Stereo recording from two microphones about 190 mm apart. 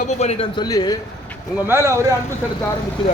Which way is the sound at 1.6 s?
15° right (ahead or behind).